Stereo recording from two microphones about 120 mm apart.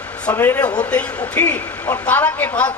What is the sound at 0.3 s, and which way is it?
A man's voice, 15° left (ahead or behind).